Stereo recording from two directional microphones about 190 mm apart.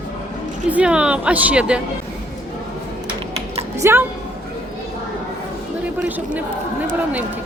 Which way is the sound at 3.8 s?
10° right (ahead or behind).